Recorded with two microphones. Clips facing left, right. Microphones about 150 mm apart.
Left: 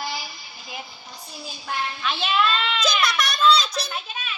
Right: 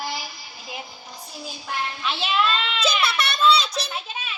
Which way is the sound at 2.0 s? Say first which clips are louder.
Left 1 dB; 25° right (ahead or behind).